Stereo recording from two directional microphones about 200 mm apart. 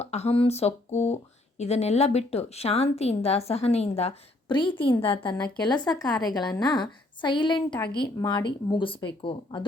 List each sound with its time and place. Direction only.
0.0 s speech: 30° left (ahead or behind)